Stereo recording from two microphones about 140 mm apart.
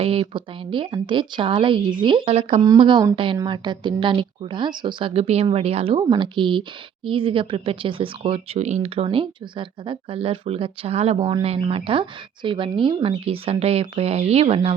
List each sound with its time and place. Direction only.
0.0 s speech: 45° right (ahead or behind)
2.7 s speech: 35° right (ahead or behind)